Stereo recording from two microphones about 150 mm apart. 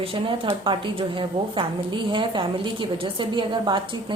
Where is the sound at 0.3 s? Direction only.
35° right (ahead or behind).